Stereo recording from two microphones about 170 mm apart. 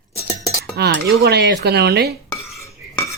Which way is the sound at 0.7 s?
70° right (ahead or behind).